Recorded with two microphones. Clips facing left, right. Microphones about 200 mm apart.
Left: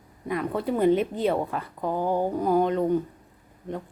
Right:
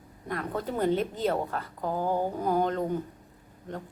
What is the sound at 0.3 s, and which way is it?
Speech, 10° left (ahead or behind).